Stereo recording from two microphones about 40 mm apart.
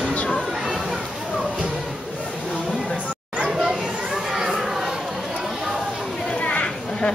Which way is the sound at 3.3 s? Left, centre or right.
Right.